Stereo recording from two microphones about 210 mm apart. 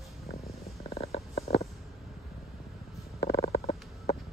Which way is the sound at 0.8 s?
30° left (ahead or behind).